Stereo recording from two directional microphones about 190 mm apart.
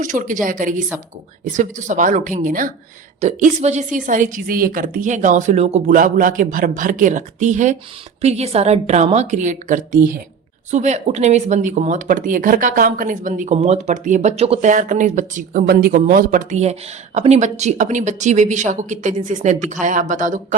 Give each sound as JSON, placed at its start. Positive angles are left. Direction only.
{"t": 0.0, "sound": "a woman's voice", "side_deg": -40}